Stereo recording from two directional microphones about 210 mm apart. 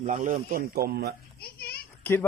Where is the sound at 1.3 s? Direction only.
50° left (ahead or behind).